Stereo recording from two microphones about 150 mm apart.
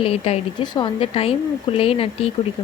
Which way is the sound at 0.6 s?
30° left (ahead or behind).